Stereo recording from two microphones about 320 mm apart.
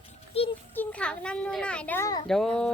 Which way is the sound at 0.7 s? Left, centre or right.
Centre.